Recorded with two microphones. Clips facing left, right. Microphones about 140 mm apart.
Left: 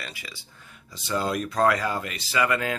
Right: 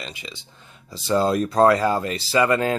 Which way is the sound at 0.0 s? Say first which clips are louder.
Right 4 dB; 20° right (ahead or behind).